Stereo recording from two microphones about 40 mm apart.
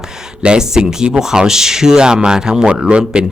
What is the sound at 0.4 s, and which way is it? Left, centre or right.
Speech, centre.